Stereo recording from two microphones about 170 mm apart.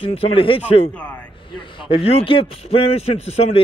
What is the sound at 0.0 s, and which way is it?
A man's voice, 35° left (ahead or behind).